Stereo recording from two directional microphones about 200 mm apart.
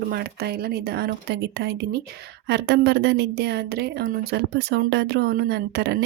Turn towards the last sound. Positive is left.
turn(degrees=-60)  # may be behind; listen again after turning